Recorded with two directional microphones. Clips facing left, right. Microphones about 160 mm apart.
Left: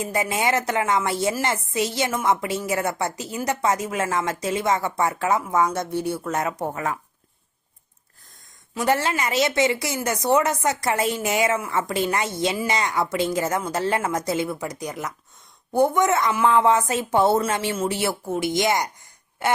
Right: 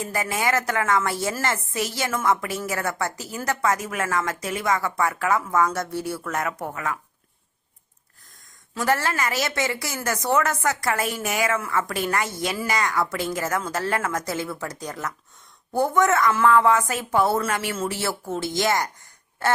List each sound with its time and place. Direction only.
0.0 s a woman's voice: 20° left (ahead or behind)
8.7 s a woman's voice: 20° left (ahead or behind)